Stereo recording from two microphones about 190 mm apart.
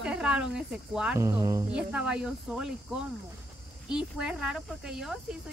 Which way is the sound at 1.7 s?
5° right (ahead or behind).